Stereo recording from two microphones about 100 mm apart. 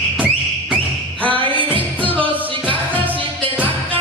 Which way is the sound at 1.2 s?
60° right (ahead or behind).